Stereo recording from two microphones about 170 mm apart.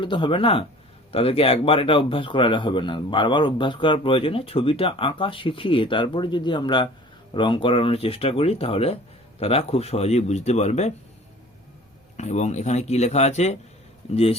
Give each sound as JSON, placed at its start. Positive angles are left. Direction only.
{"t": 0.0, "sound": "speech", "side_deg": 30}
{"t": 12.1, "sound": "speech", "side_deg": 40}